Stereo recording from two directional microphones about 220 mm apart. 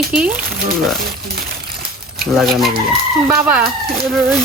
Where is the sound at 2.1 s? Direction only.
Centre (ahead or behind).